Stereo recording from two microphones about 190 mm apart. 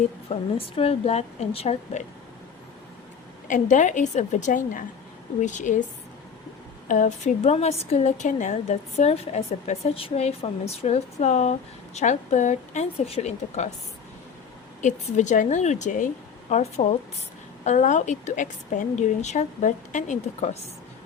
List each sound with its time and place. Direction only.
0.3 s a woman's voice: 30° left (ahead or behind)
3.5 s a woman's voice: 40° left (ahead or behind)
6.8 s a woman's voice: 40° left (ahead or behind)
14.8 s a woman's voice: 40° left (ahead or behind)